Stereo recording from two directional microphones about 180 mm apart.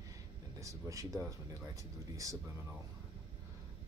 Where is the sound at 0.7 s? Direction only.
15° right (ahead or behind).